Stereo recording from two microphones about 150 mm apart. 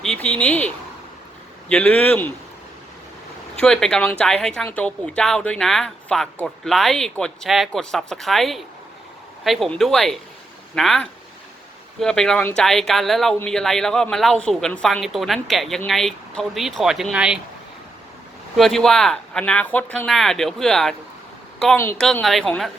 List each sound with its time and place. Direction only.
0.0 s speech: 5° left (ahead or behind)
1.7 s speech: 10° left (ahead or behind)
3.6 s speech: 5° left (ahead or behind)
18.5 s speech: centre (ahead or behind)
21.9 s speech: 5° left (ahead or behind)